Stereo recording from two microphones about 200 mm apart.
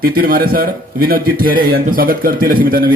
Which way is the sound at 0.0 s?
45° right (ahead or behind).